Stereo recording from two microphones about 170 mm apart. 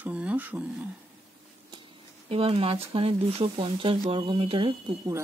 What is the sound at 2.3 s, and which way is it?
Speech, 35° right (ahead or behind).